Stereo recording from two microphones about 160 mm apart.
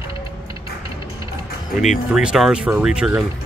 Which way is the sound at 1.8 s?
5° right (ahead or behind).